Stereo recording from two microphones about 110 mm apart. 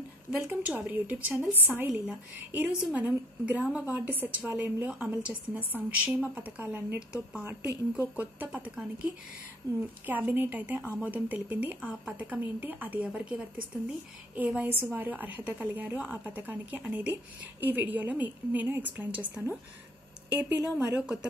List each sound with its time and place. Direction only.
0.4 s a woman's voice: 15° right (ahead or behind)
20.7 s a woman's voice: 10° right (ahead or behind)